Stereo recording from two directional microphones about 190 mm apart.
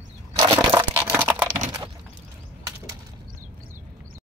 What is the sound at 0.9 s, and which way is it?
Crumpling, 10° right (ahead or behind).